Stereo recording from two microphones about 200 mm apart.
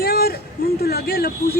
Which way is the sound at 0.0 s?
50° left (ahead or behind).